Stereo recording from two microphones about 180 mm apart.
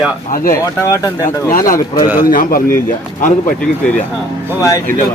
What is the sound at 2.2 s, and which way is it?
Speech, 50° left (ahead or behind).